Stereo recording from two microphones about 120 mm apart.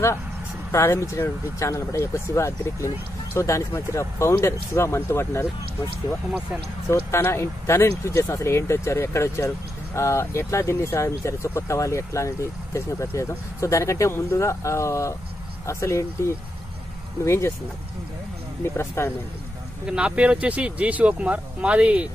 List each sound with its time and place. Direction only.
0.7 s speech: 20° left (ahead or behind)
6.9 s speech: 20° left (ahead or behind)
18.6 s speech: 20° left (ahead or behind)
19.9 s speech: 10° right (ahead or behind)